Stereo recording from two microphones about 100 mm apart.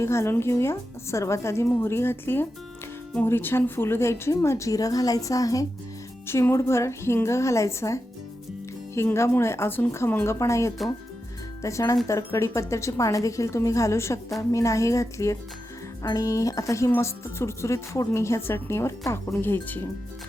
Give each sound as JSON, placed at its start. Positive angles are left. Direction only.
{"t": 0.0, "sound": "a woman's voice", "side_deg": 25}
{"t": 6.2, "sound": "speech", "side_deg": 25}
{"t": 9.0, "sound": "a woman's voice", "side_deg": 30}